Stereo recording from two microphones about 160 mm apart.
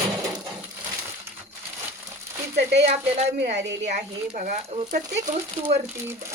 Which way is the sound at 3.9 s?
50° right (ahead or behind).